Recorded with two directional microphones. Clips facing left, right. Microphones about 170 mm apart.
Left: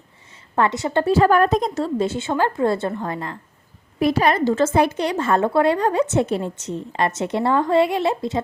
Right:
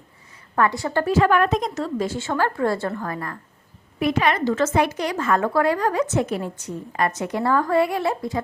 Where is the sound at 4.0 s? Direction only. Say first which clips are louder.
Left 3 dB; 35° left (ahead or behind).